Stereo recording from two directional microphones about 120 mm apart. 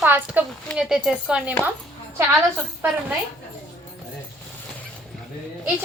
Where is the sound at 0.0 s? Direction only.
15° right (ahead or behind).